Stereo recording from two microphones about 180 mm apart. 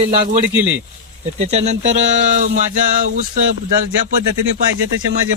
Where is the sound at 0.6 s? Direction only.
10° right (ahead or behind).